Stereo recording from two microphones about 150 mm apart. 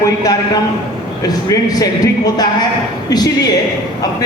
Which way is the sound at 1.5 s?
25° left (ahead or behind).